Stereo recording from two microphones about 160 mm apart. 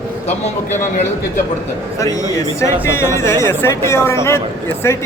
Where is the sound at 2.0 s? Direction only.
20° left (ahead or behind).